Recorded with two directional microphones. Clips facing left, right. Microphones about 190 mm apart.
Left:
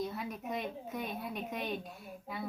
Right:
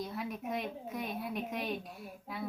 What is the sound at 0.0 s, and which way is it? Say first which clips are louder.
A woman's voice: even; centre (ahead or behind).